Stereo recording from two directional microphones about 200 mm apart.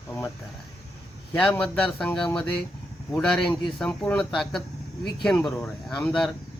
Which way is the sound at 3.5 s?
25° left (ahead or behind).